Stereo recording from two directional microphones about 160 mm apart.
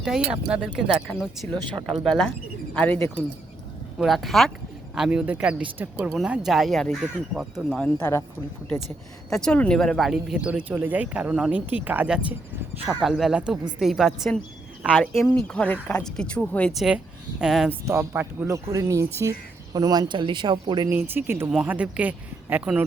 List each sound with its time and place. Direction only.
0.3 s speech: 5° right (ahead or behind); by 3.1 s 10° left (ahead or behind)
3.9 s speech: centre (ahead or behind)
9.3 s speech: 5° left (ahead or behind)
17.7 s speech: 15° right (ahead or behind)
20.9 s speech: 15° right (ahead or behind)